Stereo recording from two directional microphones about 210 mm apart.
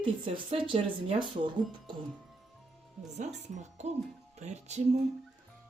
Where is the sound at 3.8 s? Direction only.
35° right (ahead or behind).